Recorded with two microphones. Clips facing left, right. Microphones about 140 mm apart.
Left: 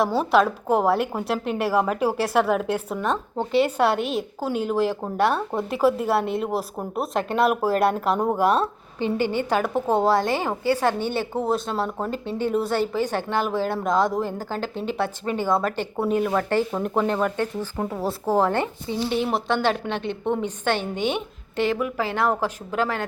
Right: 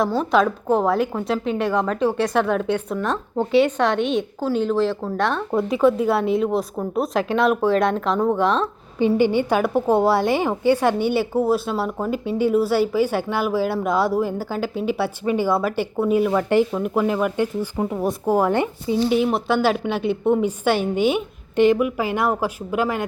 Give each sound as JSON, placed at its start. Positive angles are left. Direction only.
{"t": 0.0, "sound": "a woman's voice", "side_deg": 5}
{"t": 9.0, "sound": "a woman's voice", "side_deg": -15}